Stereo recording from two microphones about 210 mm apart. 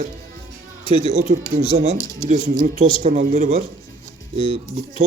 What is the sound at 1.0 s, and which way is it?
Speech, 30° right (ahead or behind).